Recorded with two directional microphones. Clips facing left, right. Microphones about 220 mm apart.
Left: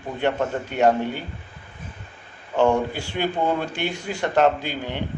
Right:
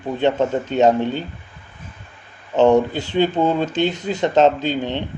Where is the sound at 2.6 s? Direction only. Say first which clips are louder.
Right 6 dB; 20° right (ahead or behind).